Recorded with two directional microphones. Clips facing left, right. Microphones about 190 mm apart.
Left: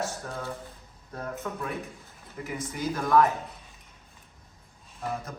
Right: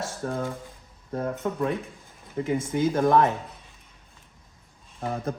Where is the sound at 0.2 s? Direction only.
35° right (ahead or behind).